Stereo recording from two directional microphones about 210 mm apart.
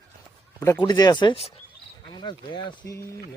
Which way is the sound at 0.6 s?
15° left (ahead or behind).